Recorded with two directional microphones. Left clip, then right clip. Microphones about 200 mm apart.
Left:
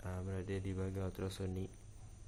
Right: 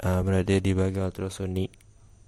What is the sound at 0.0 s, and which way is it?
Speech, 50° right (ahead or behind).